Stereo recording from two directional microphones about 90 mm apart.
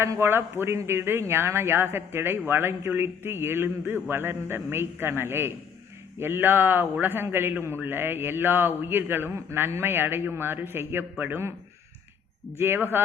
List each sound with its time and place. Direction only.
0.0 s a man's voice: 30° right (ahead or behind)
12.5 s a man's voice: 25° right (ahead or behind)